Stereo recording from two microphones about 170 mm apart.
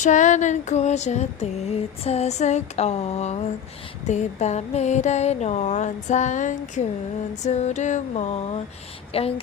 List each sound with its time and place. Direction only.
0.0 s female singing: 45° left (ahead or behind)
4.0 s a sound: 40° left (ahead or behind)
9.1 s female singing: 35° left (ahead or behind)